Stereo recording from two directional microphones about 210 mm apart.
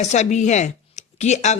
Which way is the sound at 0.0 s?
35° left (ahead or behind).